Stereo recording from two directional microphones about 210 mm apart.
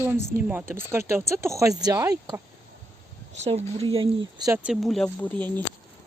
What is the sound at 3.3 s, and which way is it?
Speech, 30° right (ahead or behind).